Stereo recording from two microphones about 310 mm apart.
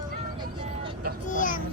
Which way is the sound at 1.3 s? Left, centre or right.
Left.